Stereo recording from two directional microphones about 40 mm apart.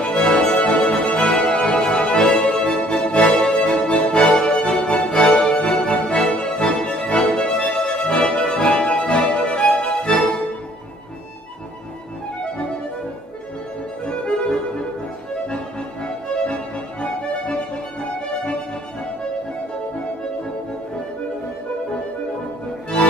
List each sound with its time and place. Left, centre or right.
0.0 s music: left
1.9 s music: left
2.5 s music: left
14.0 s accordion: left
17.0 s music: left